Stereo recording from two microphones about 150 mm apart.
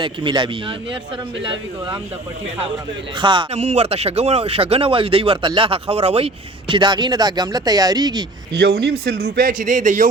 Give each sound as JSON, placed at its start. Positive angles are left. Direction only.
{"t": 0.0, "sound": "speech", "side_deg": -30}
{"t": 3.2, "sound": "speech", "side_deg": -30}
{"t": 3.5, "sound": "speech", "side_deg": -45}
{"t": 8.5, "sound": "a man's voice", "side_deg": -90}